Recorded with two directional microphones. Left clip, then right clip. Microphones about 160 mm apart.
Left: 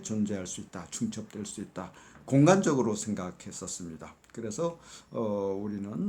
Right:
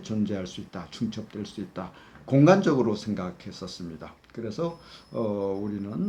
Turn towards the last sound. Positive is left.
turn(degrees=20)  # may be behind; listen again after turning